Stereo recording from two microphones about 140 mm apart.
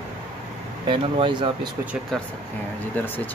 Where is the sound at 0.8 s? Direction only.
35° right (ahead or behind).